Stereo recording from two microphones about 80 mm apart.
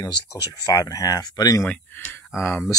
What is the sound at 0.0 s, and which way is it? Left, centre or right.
Speech, left.